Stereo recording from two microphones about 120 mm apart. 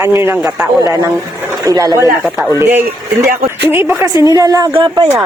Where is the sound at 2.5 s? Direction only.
20° right (ahead or behind).